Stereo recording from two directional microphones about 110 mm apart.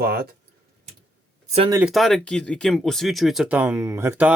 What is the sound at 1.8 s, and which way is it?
Speech, centre (ahead or behind).